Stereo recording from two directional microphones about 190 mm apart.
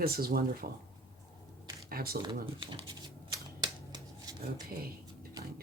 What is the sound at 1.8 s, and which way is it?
Speech, 50° right (ahead or behind).